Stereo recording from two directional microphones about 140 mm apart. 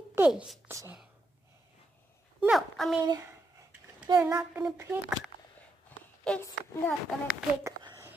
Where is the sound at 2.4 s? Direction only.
Centre (ahead or behind).